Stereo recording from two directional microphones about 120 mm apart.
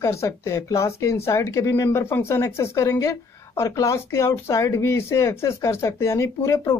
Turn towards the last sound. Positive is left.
turn(degrees=20)  # may be behind; listen again after turning